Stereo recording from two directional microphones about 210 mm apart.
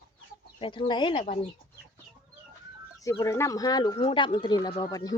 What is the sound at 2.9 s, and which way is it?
Speech, 15° left (ahead or behind).